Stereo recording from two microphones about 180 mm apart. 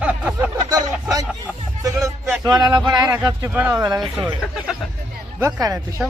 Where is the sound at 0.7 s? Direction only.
20° right (ahead or behind).